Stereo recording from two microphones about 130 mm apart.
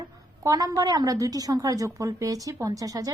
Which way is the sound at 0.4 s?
30° right (ahead or behind).